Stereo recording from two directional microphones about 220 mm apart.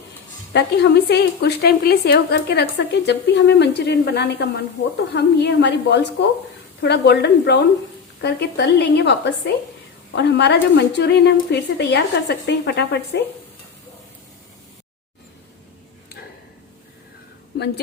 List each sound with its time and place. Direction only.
0.5 s a woman's voice: 50° left (ahead or behind)